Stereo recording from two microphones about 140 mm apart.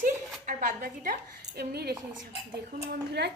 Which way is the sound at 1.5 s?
90° right.